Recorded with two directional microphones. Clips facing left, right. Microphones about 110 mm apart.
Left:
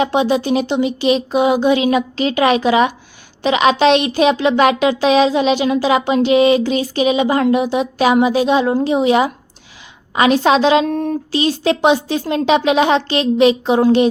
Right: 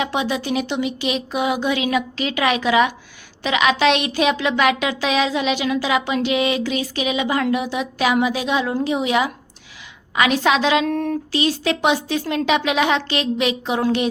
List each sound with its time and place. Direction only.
0.0 s speech: 30° left (ahead or behind)
10.9 s speech: 20° left (ahead or behind)